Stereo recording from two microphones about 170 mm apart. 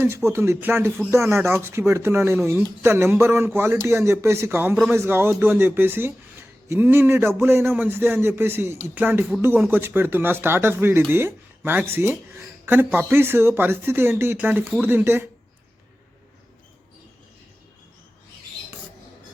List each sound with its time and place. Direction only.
0.0 s speech: 15° right (ahead or behind)